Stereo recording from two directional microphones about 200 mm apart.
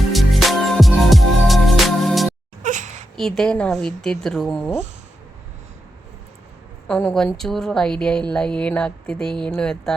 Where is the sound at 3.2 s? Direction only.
Centre (ahead or behind).